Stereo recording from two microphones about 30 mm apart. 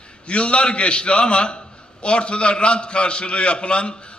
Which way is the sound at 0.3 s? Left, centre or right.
Left.